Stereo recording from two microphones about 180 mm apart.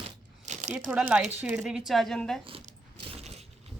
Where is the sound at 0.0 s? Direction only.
40° right (ahead or behind).